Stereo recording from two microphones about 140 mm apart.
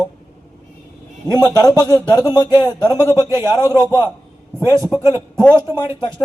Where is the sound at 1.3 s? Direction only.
25° left (ahead or behind).